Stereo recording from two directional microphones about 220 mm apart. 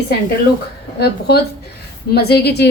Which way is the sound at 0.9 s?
45° left (ahead or behind).